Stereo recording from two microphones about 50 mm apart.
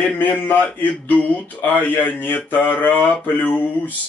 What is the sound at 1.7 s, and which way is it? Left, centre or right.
Speech, left.